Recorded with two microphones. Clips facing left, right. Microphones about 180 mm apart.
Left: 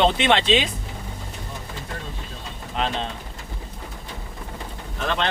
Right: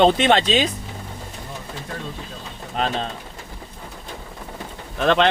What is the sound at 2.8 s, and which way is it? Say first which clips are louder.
Speech: right 2 dB; 40° right (ahead or behind).